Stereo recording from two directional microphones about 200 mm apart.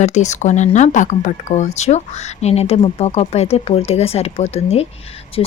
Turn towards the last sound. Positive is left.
turn(degrees=30)  # may be behind; listen again after turning